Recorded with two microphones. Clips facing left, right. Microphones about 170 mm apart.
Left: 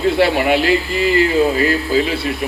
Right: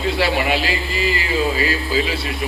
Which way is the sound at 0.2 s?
55° left (ahead or behind).